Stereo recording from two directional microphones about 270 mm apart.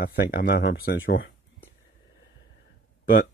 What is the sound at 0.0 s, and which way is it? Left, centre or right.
Speech, left.